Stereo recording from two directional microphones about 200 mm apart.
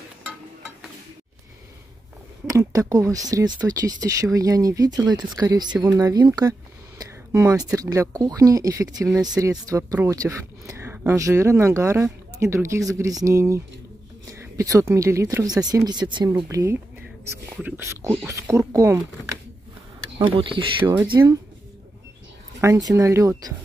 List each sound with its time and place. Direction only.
2.4 s speech: 15° right (ahead or behind)
20.2 s speech: 25° right (ahead or behind)
20.8 s speech: 10° right (ahead or behind)
22.6 s speech: 15° right (ahead or behind)